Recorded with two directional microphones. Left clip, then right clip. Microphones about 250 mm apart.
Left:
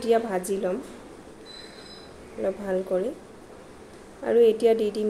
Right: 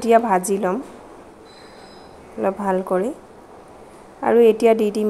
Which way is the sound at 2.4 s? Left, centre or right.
Right.